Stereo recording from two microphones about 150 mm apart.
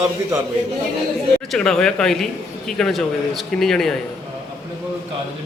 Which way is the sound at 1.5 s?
5° left (ahead or behind).